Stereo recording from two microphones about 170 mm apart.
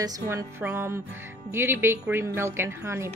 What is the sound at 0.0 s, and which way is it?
Speech, 15° right (ahead or behind).